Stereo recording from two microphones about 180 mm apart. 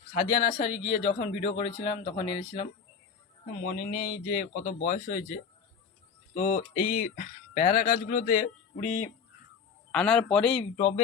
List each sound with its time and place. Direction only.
0.1 s speech: 45° left (ahead or behind)
3.9 s speech: 50° left (ahead or behind)
9.9 s a man's voice: 5° left (ahead or behind)
10.8 s speech: 40° left (ahead or behind)